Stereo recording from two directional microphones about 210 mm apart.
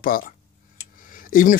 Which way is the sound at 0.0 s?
40° left (ahead or behind).